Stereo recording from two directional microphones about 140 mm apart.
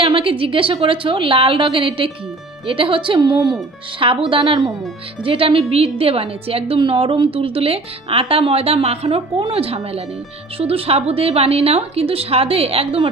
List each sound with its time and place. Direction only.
0.0 s a woman's voice: 40° right (ahead or behind)